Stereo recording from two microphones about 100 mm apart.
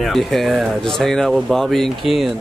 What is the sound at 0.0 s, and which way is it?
A man's voice, centre (ahead or behind).